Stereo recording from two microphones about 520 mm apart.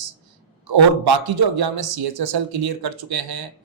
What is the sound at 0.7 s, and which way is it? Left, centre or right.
Speech, right.